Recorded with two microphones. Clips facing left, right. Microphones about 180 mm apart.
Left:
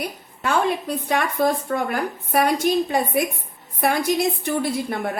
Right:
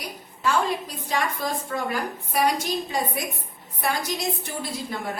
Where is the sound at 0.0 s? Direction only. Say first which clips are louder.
Left 1 dB; 55° left (ahead or behind).